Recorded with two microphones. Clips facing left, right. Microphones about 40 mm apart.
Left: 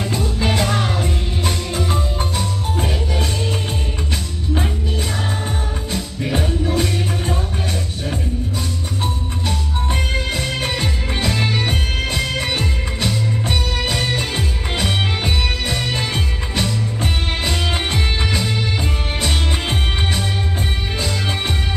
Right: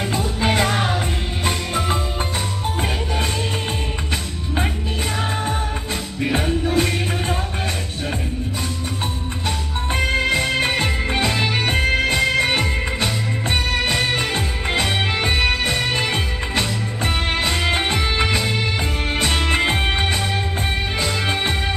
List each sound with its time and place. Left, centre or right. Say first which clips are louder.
0.1 s music: right 1 dB; right
5.9 s music: even; right
6.7 s music: right 1 dB; right
9.5 s music: even; right
19.7 s music: right 2 dB; right